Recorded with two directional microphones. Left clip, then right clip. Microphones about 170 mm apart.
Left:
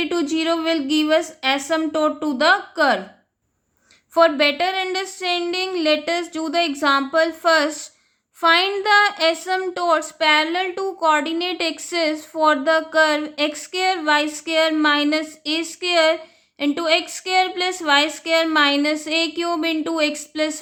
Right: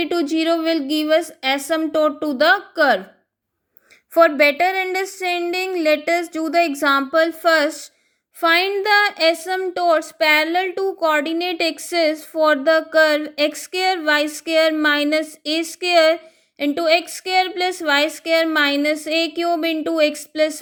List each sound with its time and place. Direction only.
0.0 s speech: 20° right (ahead or behind)
4.1 s speech: 20° right (ahead or behind)